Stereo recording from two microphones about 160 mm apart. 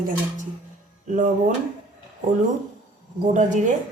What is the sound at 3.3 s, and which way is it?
Speech, 50° right (ahead or behind).